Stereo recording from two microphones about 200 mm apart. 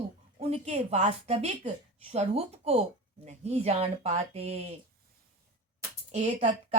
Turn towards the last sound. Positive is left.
turn(degrees=-35)  # may be behind; listen again after turning